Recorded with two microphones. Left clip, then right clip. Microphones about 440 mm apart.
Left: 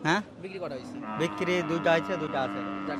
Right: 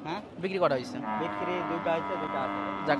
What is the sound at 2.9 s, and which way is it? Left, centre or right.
Speech, right.